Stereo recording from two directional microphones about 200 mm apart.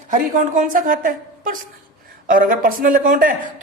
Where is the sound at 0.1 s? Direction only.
40° right (ahead or behind).